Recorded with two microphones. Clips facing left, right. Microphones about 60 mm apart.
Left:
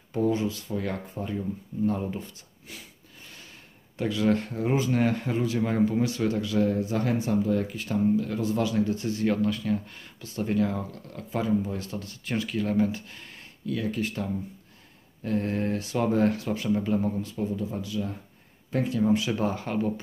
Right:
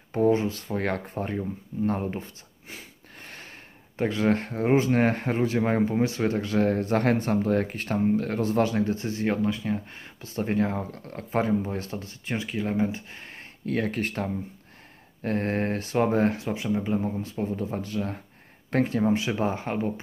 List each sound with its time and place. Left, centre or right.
0.1 s speech: right
3.2 s a sound: right
4.0 s speech: right
13.7 s speech: right; by 17.1 s centre
17.2 s speech: right
17.6 s speech: right